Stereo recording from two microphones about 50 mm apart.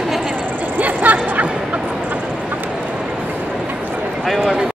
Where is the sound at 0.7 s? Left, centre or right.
Right.